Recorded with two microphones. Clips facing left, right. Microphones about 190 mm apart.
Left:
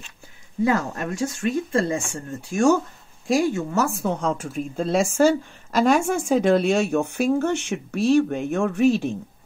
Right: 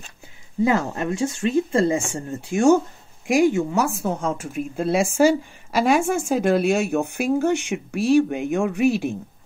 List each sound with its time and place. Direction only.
0.7 s a woman's voice: 25° right (ahead or behind)